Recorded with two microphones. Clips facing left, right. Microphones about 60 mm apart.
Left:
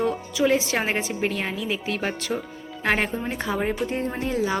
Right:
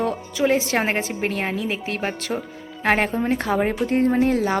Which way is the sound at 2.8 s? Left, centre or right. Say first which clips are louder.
Right 3 dB; right.